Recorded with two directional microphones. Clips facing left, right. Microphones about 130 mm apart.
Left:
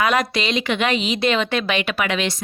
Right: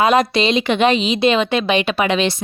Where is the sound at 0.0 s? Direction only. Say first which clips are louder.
Right 5 dB; 25° right (ahead or behind).